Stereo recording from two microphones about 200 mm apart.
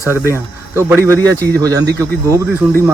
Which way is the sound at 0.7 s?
10° right (ahead or behind).